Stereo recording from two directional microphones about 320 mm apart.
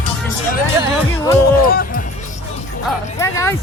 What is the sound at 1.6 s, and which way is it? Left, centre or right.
Music, left.